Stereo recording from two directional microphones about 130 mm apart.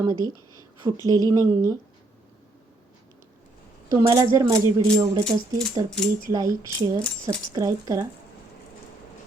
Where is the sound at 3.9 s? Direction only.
25° right (ahead or behind).